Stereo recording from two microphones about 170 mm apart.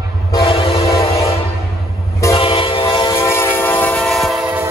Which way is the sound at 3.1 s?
15° left (ahead or behind).